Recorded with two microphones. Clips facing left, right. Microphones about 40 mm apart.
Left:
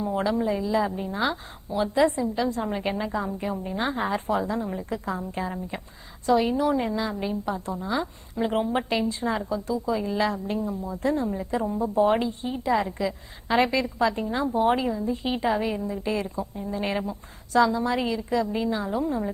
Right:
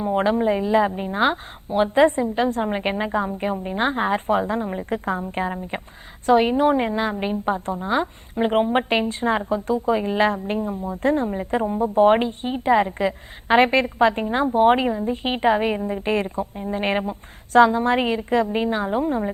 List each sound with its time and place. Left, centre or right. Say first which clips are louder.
0.0 s a woman's voice: right 5 dB; right